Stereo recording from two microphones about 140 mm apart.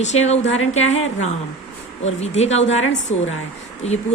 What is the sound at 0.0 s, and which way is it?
A woman's voice, 50° left (ahead or behind).